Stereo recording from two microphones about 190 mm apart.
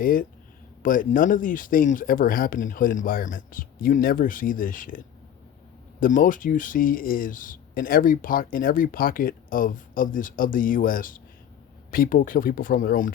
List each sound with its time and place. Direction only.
0.0 s speech: 45° left (ahead or behind)
6.0 s speech: 45° left (ahead or behind)